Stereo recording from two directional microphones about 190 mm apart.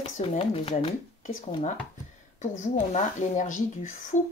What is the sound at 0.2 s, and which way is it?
Speech, 30° left (ahead or behind).